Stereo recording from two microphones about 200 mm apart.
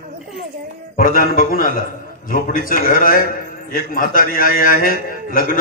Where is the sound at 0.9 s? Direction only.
45° left (ahead or behind).